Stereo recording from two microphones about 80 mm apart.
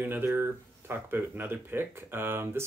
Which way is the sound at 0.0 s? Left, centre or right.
Right.